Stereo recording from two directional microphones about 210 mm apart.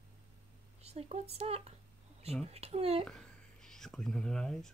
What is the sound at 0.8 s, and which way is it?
Speech, 30° right (ahead or behind).